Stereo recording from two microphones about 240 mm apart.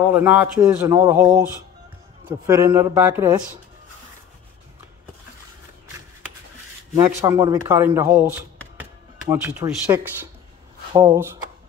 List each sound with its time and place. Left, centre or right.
0.1 s speech: centre
7.0 s speech: centre